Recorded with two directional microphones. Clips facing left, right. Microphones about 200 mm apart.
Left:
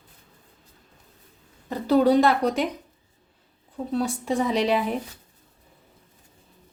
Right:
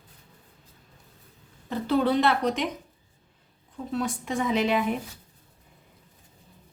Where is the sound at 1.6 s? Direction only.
40° left (ahead or behind).